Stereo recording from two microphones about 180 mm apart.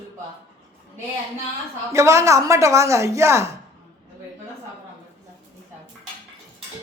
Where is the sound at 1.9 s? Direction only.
15° right (ahead or behind).